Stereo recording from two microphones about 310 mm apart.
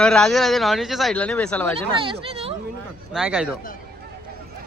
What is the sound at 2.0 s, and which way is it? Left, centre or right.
Speech, centre.